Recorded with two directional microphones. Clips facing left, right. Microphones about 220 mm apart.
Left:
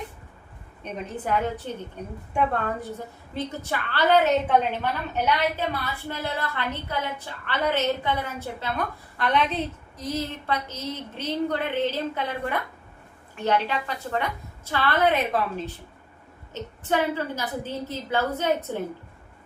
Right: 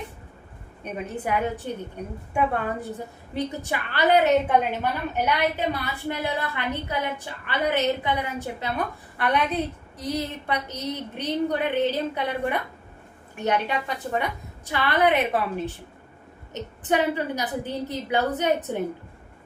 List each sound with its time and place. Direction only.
0.9 s a woman's voice: 10° right (ahead or behind)